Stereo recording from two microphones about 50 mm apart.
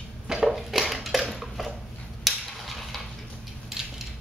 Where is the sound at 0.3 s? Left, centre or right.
Centre.